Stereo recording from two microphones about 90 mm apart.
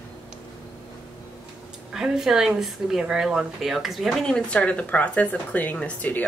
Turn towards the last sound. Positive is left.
turn(degrees=20)  # may be behind; listen again after turning